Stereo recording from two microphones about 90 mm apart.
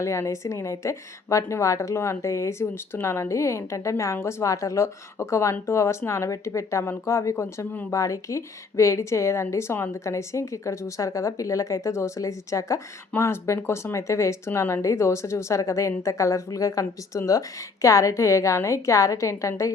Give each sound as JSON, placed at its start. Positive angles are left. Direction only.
{"t": 0.0, "sound": "a woman's voice", "side_deg": 30}
{"t": 7.9, "sound": "a woman's voice", "side_deg": 35}